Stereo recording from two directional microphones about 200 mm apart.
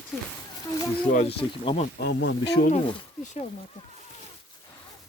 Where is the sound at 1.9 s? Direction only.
60° left (ahead or behind).